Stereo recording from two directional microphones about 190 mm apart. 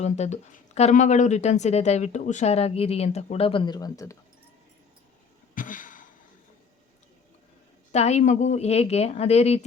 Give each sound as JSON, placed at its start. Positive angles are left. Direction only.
{"t": 0.0, "sound": "speech", "side_deg": 35}
{"t": 5.5, "sound": "a sound", "side_deg": 45}
{"t": 7.9, "sound": "speech", "side_deg": 35}